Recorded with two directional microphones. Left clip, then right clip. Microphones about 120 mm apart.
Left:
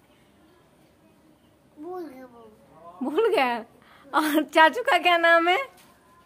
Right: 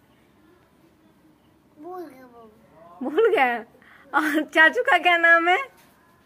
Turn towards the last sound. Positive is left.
turn(degrees=5)  # may be behind; listen again after turning